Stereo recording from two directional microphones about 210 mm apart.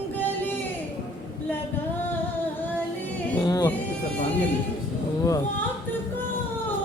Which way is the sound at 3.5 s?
20° left (ahead or behind).